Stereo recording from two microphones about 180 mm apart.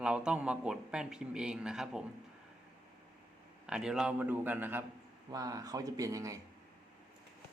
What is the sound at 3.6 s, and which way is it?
A man's voice, 5° right (ahead or behind).